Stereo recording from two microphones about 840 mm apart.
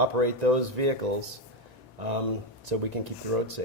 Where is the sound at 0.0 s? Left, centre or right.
Right.